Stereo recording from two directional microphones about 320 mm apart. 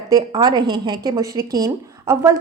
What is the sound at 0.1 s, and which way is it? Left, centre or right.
A woman's voice, centre.